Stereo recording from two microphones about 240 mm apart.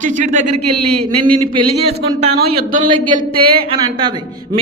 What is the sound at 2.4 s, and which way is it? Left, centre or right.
Speech, right.